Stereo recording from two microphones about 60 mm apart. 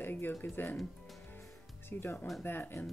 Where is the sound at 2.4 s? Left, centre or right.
Left.